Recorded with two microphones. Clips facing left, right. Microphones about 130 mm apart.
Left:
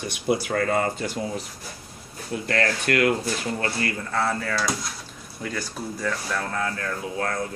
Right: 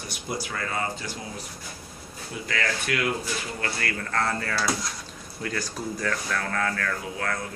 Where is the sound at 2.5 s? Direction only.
55° left (ahead or behind).